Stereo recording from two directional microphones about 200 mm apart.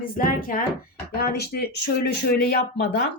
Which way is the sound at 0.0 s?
45° left (ahead or behind).